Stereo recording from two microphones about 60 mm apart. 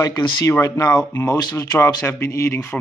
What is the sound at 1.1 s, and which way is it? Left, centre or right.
Speech, left.